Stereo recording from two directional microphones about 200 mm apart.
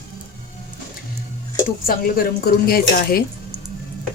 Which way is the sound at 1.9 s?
45° left (ahead or behind).